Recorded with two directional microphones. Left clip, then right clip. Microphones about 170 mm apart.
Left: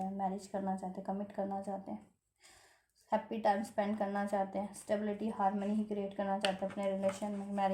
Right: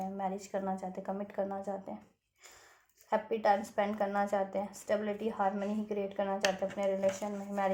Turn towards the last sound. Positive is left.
turn(degrees=-30)  # may be behind; listen again after turning